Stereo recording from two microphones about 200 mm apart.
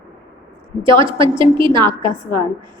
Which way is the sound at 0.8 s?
25° right (ahead or behind).